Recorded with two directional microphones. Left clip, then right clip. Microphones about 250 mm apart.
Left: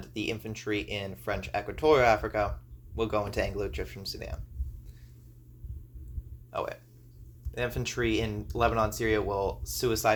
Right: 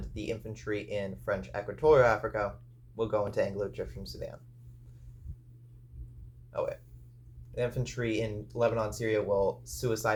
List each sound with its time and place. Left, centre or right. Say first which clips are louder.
0.1 s speech: left 3 dB; left
7.5 s speech: left 1 dB; left